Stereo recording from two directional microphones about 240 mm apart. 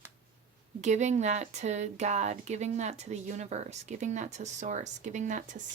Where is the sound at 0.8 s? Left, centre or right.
Right.